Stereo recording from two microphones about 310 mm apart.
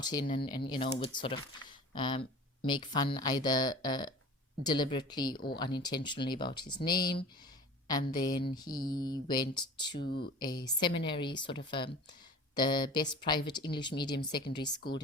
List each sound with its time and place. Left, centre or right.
0.0 s speech: centre
12.5 s speech: centre